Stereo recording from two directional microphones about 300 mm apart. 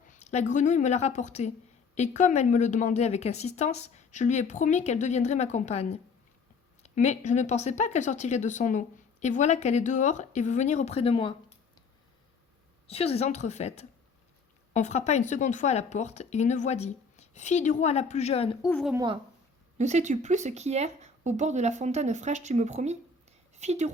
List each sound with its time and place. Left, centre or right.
0.0 s a sound: left
0.5 s a woman's voice: left
12.9 s a woman's voice: centre
18.7 s a woman's voice: centre
18.9 s speech: centre